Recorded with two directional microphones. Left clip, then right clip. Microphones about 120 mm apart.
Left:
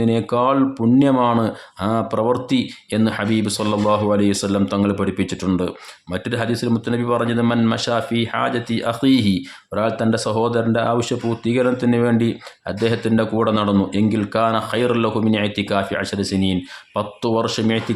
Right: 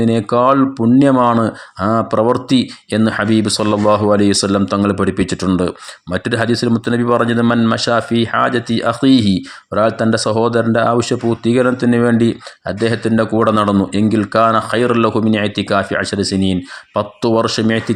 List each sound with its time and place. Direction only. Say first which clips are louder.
0.0 s speech: right 5 dB; 35° right (ahead or behind)